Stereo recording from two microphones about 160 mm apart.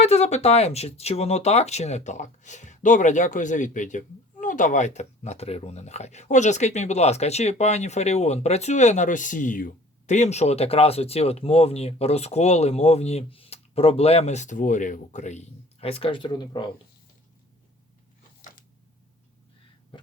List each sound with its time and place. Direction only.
0.0 s speech: 40° left (ahead or behind)
19.9 s cough: 30° left (ahead or behind)